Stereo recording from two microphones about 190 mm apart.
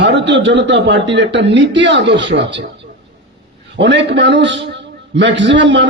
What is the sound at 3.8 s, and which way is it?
A man's voice, 70° right (ahead or behind).